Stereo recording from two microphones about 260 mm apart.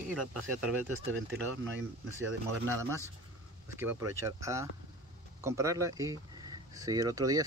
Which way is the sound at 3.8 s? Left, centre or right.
Centre.